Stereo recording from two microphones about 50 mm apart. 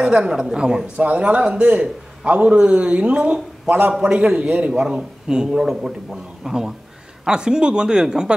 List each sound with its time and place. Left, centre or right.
0.0 s a woman's voice: centre
0.9 s a man's voice: right
3.6 s a man's voice: right
4.0 s a man's voice: right